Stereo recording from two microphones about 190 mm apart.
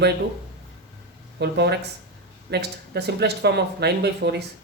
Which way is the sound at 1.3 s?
65° right (ahead or behind).